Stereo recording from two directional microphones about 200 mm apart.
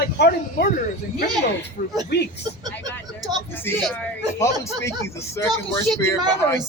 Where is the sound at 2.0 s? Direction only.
55° left (ahead or behind).